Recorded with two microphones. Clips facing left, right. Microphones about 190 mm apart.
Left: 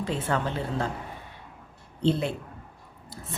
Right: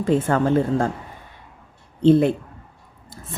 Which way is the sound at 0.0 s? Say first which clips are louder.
Right 9 dB; 50° right (ahead or behind).